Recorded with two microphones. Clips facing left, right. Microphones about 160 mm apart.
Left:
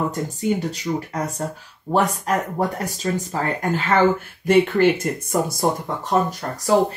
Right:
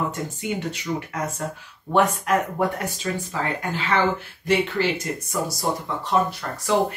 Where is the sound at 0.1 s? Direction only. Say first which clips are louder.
Left 5 dB; 35° left (ahead or behind).